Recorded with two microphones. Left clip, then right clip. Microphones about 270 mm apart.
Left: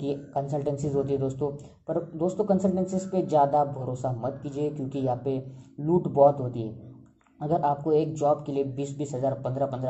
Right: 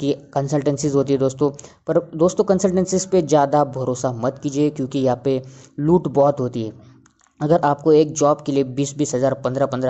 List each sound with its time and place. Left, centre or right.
0.0 s speech: right